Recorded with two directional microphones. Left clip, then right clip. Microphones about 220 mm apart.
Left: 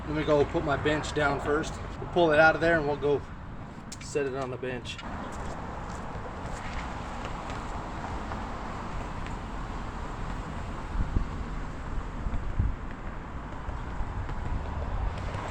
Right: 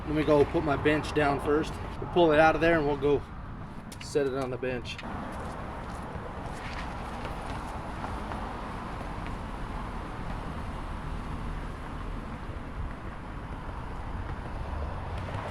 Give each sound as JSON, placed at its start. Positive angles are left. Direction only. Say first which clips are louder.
{"t": 0.3, "sound": "speech", "louder": "right 1 dB", "side_deg": -15}